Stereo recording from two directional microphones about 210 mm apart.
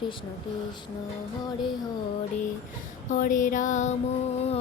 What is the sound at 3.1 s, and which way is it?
Music, 40° left (ahead or behind).